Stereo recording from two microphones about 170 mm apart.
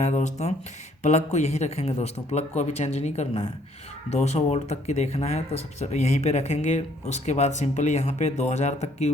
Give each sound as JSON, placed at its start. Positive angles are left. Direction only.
{"t": 0.0, "sound": "speech", "side_deg": 45}